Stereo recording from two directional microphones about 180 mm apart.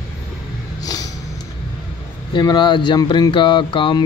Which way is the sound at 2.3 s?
25° left (ahead or behind).